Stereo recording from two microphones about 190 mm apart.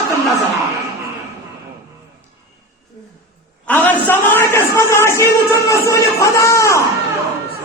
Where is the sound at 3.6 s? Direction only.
10° left (ahead or behind).